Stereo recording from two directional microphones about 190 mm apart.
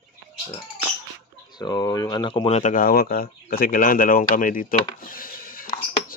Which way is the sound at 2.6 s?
45° left (ahead or behind).